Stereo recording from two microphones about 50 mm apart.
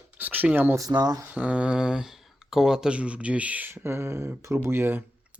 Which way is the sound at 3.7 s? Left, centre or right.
Right.